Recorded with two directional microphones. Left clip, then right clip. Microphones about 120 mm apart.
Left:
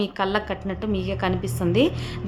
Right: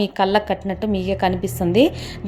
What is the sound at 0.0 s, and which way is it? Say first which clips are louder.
A woman's voice: right 6 dB; 40° right (ahead or behind).